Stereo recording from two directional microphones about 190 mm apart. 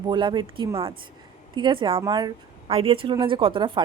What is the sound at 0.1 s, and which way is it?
Speech, 25° right (ahead or behind).